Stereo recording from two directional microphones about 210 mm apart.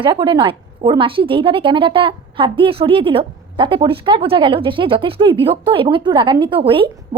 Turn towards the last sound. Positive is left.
turn(degrees=-25)  # may be behind; listen again after turning